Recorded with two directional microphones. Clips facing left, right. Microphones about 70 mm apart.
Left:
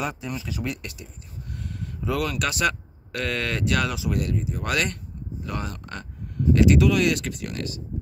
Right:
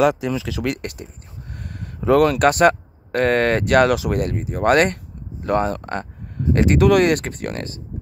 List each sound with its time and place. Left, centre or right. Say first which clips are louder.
0.0 s speech: right 12 dB; right
1.0 s speech: right 4 dB; right